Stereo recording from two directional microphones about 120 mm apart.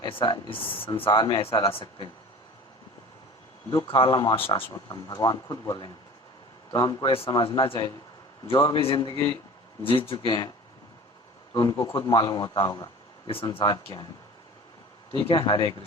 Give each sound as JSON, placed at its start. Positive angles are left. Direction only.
{"t": 0.0, "sound": "speech", "side_deg": 45}
{"t": 3.7, "sound": "speech", "side_deg": 40}
{"t": 4.9, "sound": "a man's voice", "side_deg": 35}
{"t": 7.1, "sound": "speech", "side_deg": 50}
{"t": 11.5, "sound": "a man's voice", "side_deg": 40}
{"t": 15.3, "sound": "speech", "side_deg": 45}